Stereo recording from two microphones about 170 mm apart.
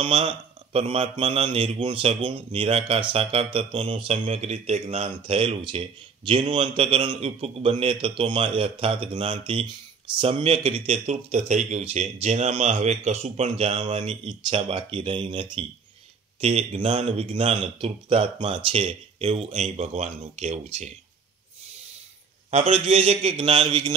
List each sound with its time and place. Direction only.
0.0 s a man's voice: 35° right (ahead or behind)
14.2 s a man's voice: 30° right (ahead or behind)
22.5 s a man's voice: 40° right (ahead or behind)